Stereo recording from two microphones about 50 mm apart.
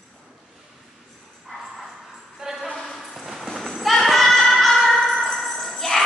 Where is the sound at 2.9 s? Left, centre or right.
Centre.